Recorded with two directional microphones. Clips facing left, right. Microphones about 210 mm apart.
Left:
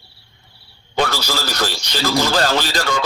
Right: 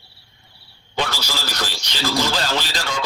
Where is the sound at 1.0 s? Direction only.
45° left (ahead or behind).